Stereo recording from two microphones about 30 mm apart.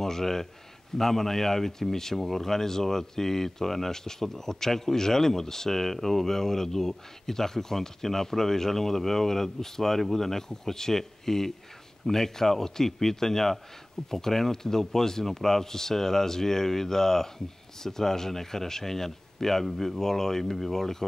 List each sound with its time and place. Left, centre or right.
0.0 s speech: centre